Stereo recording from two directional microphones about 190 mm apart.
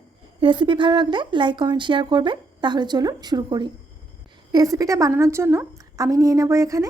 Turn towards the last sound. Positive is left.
turn(degrees=-15)  # may be behind; listen again after turning